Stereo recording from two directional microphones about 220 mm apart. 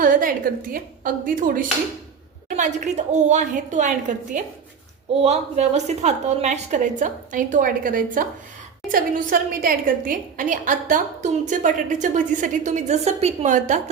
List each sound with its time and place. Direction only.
0.0 s a woman's voice: 40° right (ahead or behind)